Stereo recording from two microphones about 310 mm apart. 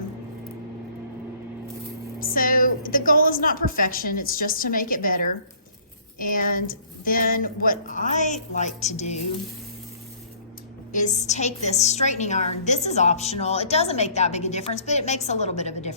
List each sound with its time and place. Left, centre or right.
2.1 s a woman's voice: left
10.9 s a woman's voice: left